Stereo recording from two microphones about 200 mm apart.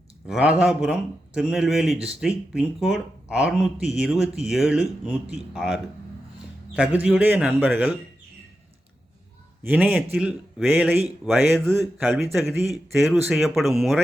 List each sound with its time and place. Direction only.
0.3 s speech: 5° right (ahead or behind)
9.6 s speech: 10° right (ahead or behind)